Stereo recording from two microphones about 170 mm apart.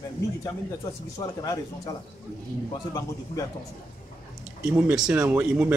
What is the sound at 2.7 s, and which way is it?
Speech, 20° left (ahead or behind).